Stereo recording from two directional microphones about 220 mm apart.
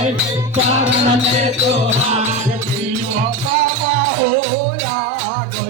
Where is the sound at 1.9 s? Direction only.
30° right (ahead or behind).